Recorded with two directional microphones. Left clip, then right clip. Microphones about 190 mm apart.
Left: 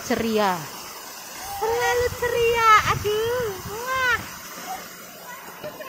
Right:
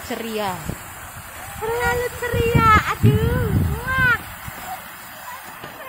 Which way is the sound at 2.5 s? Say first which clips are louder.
Right 1 dB; 5° right (ahead or behind).